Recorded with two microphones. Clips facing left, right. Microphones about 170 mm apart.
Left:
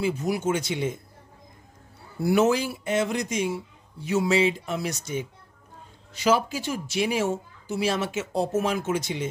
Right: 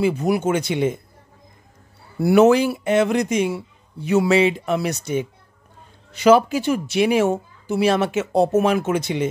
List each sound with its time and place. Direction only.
0.0 s speech: 65° right (ahead or behind)
2.1 s speech: 70° right (ahead or behind)